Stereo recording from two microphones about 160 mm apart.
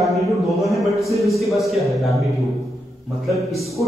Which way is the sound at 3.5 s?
Centre (ahead or behind).